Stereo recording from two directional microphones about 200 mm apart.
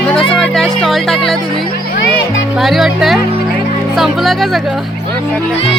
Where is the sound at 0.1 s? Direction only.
Centre (ahead or behind).